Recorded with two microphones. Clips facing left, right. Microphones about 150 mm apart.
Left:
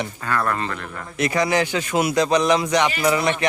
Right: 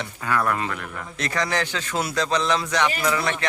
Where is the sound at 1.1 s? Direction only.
10° left (ahead or behind).